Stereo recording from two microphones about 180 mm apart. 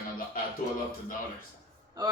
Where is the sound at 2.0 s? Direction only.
20° right (ahead or behind).